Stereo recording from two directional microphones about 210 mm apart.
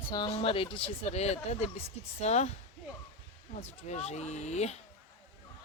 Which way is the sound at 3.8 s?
30° left (ahead or behind).